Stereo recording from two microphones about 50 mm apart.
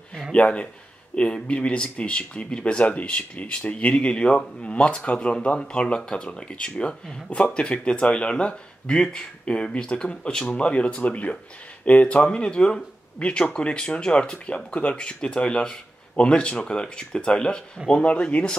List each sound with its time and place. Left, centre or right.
0.3 s speech: left